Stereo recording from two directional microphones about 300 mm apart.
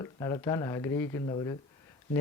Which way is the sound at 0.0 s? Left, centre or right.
Centre.